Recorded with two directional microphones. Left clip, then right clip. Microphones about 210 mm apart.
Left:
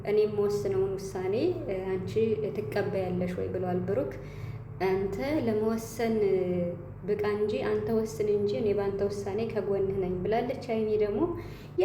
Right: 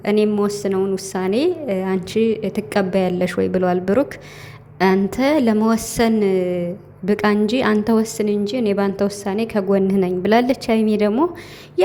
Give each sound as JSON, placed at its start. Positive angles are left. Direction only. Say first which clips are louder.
{"t": 0.0, "sound": "a woman's voice", "louder": "right 8 dB", "side_deg": -45}